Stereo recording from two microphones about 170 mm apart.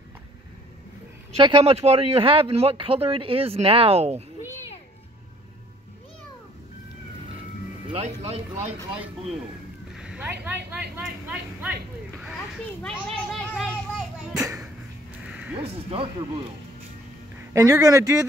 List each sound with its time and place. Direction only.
1.4 s speech: 35° right (ahead or behind)
7.9 s speech: 35° right (ahead or behind)
9.9 s speech: 5° right (ahead or behind)
12.2 s children playing: centre (ahead or behind)
15.2 s a sound: 5° right (ahead or behind)
15.6 s speech: 35° right (ahead or behind)
17.5 s speech: 20° right (ahead or behind)